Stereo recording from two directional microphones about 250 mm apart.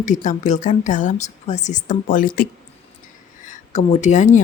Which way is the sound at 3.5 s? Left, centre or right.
Left.